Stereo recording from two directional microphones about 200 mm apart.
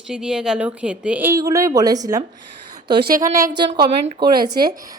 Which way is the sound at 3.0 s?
50° right (ahead or behind).